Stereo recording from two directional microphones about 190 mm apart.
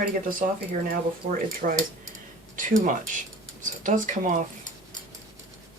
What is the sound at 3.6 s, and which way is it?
Speech, 45° right (ahead or behind).